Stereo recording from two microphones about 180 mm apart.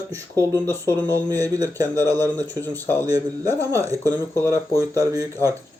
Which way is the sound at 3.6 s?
20° right (ahead or behind).